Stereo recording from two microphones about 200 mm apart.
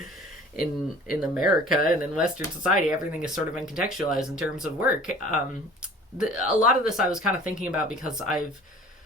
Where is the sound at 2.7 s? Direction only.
40° left (ahead or behind).